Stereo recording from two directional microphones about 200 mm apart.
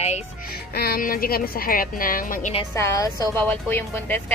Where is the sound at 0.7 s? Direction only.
50° left (ahead or behind).